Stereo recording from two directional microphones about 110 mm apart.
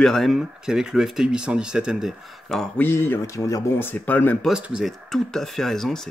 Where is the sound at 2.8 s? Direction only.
20° left (ahead or behind).